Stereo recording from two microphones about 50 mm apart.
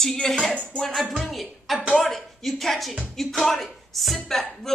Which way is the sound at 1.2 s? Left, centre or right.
Centre.